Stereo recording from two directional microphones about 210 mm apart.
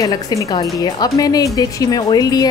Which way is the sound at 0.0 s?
15° left (ahead or behind).